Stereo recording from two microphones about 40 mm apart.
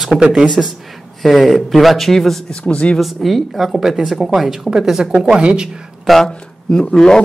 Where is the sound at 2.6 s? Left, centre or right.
Left.